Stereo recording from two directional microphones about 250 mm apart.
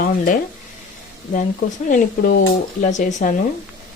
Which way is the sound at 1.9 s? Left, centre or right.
Left.